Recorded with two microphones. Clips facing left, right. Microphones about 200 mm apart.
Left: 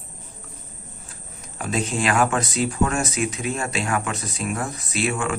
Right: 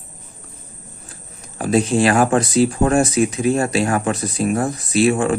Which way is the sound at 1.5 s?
35° right (ahead or behind).